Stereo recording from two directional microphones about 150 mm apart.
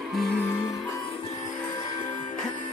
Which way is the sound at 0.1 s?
Centre (ahead or behind).